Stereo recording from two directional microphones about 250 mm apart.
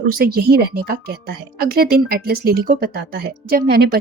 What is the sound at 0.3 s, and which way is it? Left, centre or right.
Speech, right.